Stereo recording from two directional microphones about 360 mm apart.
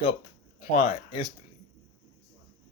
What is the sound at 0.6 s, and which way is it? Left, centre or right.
Speech, left.